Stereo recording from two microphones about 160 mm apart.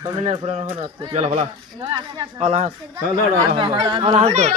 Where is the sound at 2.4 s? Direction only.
45° right (ahead or behind).